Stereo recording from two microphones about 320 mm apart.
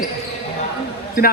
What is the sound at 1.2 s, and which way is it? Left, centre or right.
Speech, left.